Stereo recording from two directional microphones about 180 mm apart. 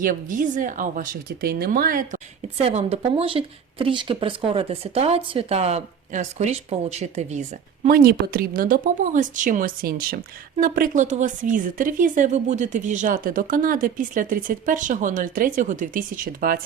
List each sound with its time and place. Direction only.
0.0 s speech: 50° right (ahead or behind)
2.6 s speech: 35° right (ahead or behind)
7.9 s speech: 55° right (ahead or behind)